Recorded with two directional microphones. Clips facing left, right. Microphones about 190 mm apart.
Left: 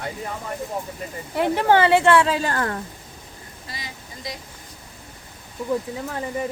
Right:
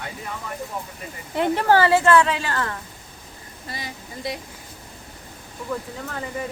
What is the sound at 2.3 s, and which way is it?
Speech, 40° left (ahead or behind).